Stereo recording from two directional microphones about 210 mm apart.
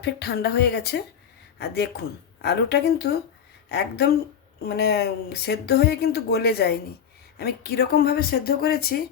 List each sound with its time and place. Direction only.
0.0 s speech: 50° left (ahead or behind)